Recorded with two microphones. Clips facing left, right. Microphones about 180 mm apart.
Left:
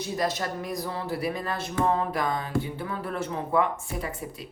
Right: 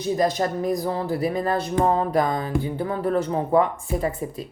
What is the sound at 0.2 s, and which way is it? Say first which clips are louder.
Speech: right 5 dB; 45° right (ahead or behind).